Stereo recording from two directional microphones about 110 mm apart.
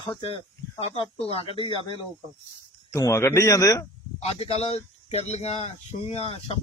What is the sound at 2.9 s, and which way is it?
Speech, 30° left (ahead or behind).